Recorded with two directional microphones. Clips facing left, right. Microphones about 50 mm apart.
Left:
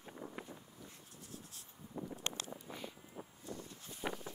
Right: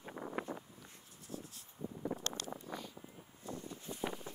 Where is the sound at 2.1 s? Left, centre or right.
Right.